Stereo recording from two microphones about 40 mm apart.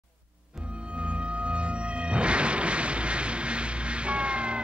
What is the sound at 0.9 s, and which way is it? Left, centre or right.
Music, right.